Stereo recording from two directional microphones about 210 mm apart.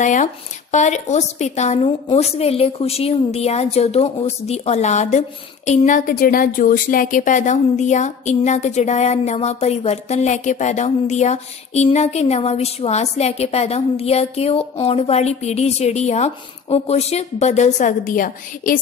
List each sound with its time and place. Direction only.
0.0 s speech: 35° left (ahead or behind)